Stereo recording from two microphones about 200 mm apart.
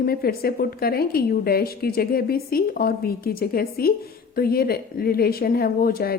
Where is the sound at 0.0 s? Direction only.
50° left (ahead or behind).